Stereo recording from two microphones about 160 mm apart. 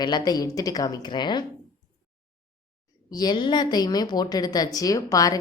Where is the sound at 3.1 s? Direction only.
25° left (ahead or behind).